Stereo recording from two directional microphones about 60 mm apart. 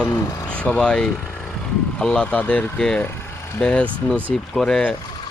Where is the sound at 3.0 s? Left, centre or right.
Left.